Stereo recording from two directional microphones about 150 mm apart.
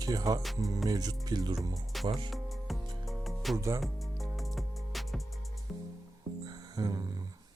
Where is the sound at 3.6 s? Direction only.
20° right (ahead or behind).